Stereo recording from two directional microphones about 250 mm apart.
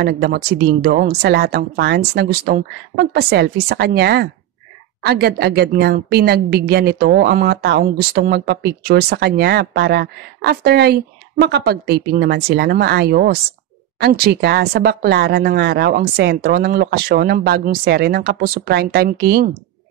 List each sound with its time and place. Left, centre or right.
0.0 s a woman's voice: right